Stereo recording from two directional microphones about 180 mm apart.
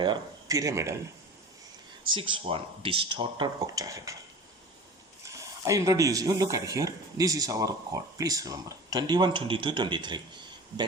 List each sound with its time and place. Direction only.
0.0 s speech: 20° right (ahead or behind)
2.0 s speech: 25° right (ahead or behind)
5.2 s speech: 15° right (ahead or behind)